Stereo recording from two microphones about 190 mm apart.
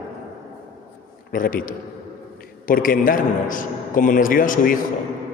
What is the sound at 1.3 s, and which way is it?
A man's voice, 50° left (ahead or behind).